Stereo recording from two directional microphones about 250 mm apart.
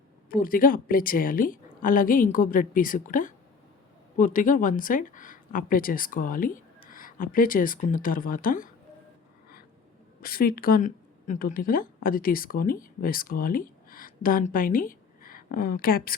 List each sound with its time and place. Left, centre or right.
0.3 s a woman's voice: left
10.2 s speech: left